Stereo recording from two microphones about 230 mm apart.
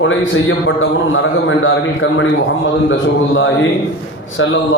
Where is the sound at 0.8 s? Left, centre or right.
Left.